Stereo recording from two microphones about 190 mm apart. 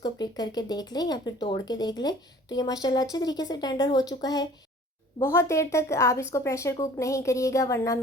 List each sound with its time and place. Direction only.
0.0 s a woman's voice: 20° left (ahead or behind)